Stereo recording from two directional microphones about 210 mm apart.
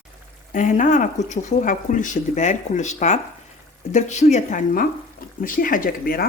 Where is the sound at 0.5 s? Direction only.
35° left (ahead or behind).